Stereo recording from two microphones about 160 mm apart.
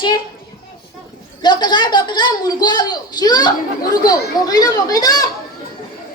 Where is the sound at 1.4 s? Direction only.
25° left (ahead or behind).